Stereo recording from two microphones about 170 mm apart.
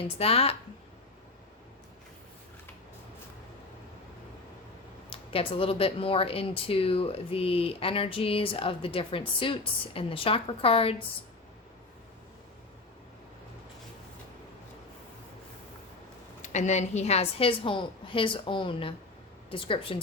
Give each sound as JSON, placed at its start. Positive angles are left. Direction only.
{"t": 0.0, "sound": "speech", "side_deg": 35}
{"t": 5.0, "sound": "speech", "side_deg": 35}
{"t": 16.4, "sound": "speech", "side_deg": 45}